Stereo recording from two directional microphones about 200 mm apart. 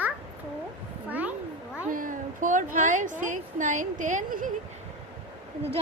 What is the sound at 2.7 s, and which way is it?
A woman's voice, 40° right (ahead or behind).